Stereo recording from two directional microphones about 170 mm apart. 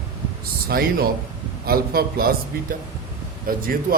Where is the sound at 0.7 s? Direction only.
60° right (ahead or behind).